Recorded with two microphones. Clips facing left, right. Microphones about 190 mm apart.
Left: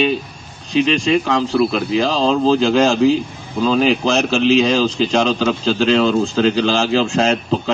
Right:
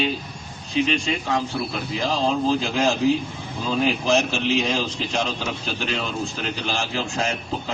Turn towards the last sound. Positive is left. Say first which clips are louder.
# left 9 dB
turn(degrees=80)